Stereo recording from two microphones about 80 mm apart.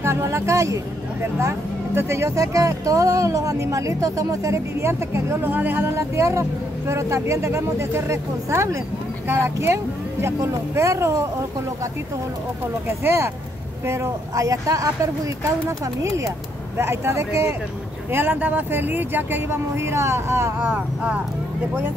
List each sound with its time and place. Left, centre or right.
0.0 s speech: right
2.0 s speech: right
12.8 s speech: right
16.7 s speech: right
20.6 s speech: centre